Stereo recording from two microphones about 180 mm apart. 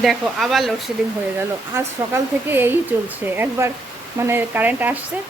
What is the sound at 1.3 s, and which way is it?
Speech, 10° right (ahead or behind).